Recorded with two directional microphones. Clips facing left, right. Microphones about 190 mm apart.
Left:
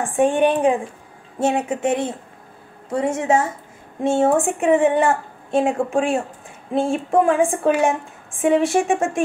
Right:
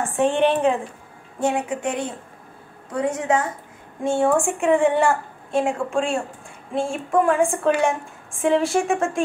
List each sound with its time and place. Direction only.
0.0 s a woman's voice: 15° left (ahead or behind)